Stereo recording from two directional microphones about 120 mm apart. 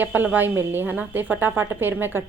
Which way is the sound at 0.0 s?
15° right (ahead or behind).